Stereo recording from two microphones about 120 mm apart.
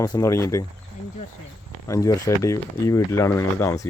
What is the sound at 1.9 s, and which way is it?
Speech, 30° left (ahead or behind).